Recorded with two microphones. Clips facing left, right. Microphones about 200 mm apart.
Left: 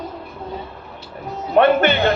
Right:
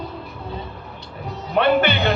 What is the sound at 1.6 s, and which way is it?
Speech, 50° left (ahead or behind).